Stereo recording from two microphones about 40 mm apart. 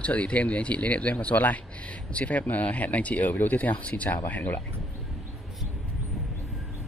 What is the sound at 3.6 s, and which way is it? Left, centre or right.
Speech, left.